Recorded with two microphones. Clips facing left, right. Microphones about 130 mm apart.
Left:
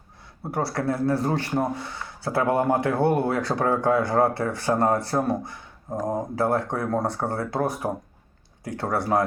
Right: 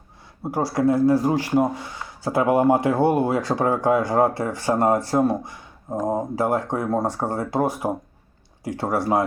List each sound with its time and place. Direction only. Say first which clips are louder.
0.5 s speech: right 6 dB; 15° right (ahead or behind)